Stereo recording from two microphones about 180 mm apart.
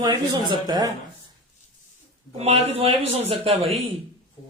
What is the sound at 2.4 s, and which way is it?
Speech, 35° right (ahead or behind).